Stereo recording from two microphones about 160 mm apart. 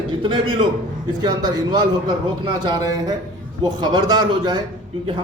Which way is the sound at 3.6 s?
25° right (ahead or behind).